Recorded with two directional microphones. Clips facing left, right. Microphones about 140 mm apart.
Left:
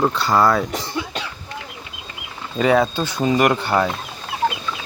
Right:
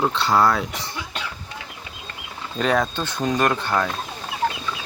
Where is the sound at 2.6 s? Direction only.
5° left (ahead or behind).